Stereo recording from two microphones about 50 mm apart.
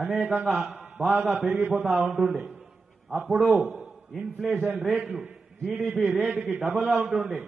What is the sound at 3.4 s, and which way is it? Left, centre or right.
Speech, right.